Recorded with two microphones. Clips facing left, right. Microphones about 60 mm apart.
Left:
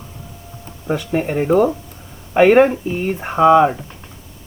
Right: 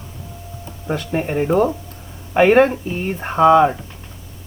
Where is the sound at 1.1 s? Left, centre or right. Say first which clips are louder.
Left 2 dB; centre.